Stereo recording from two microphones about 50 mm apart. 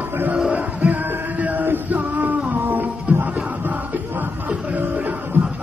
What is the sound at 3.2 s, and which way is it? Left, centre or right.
Crowd, right.